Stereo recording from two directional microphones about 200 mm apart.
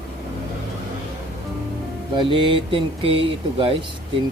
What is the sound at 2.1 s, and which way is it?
Speech, 25° right (ahead or behind).